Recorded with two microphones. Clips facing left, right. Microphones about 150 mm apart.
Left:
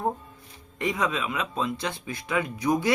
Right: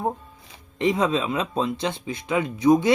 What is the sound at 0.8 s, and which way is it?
Speech, 25° right (ahead or behind).